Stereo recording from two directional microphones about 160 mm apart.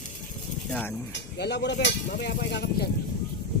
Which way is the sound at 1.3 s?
90° left.